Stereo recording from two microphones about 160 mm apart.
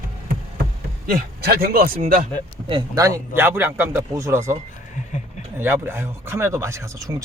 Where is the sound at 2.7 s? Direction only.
25° right (ahead or behind).